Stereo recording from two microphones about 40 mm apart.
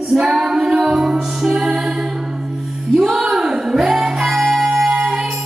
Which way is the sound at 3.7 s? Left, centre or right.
Centre.